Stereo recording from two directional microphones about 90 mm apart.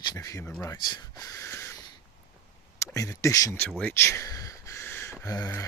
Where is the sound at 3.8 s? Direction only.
25° left (ahead or behind).